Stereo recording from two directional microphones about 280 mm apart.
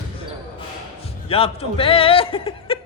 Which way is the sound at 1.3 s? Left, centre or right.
Centre.